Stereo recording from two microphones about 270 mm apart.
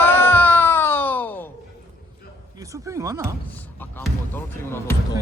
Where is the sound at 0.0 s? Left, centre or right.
Centre.